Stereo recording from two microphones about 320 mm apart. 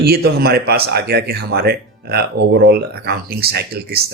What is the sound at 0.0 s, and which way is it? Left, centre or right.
Speech, right.